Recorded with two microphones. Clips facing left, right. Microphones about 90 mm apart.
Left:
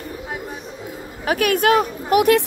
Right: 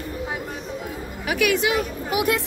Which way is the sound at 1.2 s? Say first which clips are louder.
Left 4 dB; 40° left (ahead or behind).